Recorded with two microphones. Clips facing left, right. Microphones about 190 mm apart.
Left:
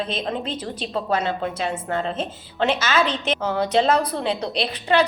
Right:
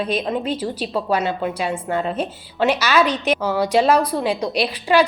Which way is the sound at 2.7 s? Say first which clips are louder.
Right 3 dB; 25° left (ahead or behind).